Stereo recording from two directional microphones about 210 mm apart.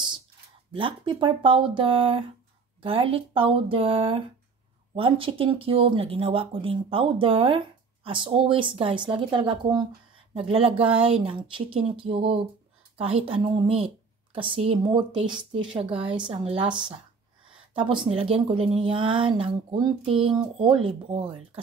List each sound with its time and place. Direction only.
0.7 s speech: 25° right (ahead or behind)